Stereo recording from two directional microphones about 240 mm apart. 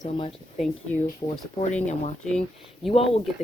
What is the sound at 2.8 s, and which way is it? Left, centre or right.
Speech, left.